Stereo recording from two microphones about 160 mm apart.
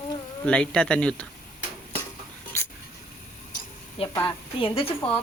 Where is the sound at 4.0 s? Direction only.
40° left (ahead or behind).